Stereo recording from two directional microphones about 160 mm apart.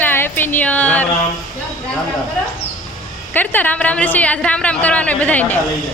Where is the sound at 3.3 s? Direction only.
10° left (ahead or behind).